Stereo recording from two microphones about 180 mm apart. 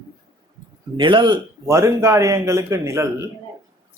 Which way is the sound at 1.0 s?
25° right (ahead or behind).